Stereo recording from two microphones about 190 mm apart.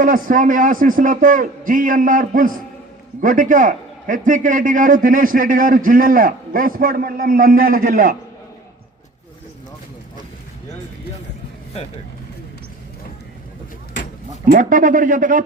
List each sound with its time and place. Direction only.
0.0 s a man's voice: 45° right (ahead or behind)
14.4 s a man's voice: 45° right (ahead or behind)